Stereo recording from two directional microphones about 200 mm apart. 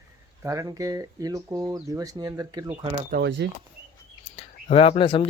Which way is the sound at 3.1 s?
55° right (ahead or behind).